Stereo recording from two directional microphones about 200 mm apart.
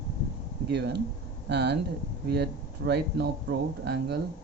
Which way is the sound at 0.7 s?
55° right (ahead or behind).